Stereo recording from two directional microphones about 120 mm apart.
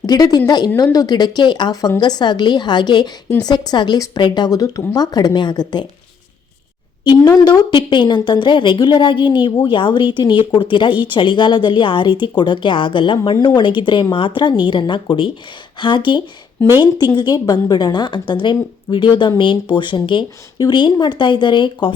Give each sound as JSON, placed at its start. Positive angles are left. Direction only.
{"t": 0.0, "sound": "speech", "side_deg": 35}
{"t": 7.0, "sound": "speech", "side_deg": 35}